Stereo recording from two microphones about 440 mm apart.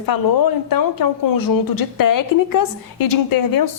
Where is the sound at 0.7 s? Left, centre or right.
Left.